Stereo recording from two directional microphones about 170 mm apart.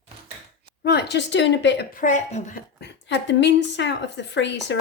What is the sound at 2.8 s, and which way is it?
A woman's voice, 90° left.